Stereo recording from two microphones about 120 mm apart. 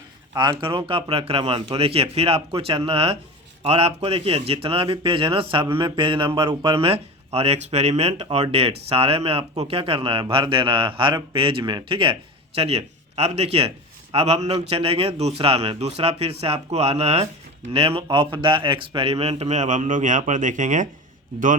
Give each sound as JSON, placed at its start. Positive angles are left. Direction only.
{"t": 0.3, "sound": "a man's voice", "side_deg": -40}
{"t": 12.5, "sound": "a man's voice", "side_deg": -60}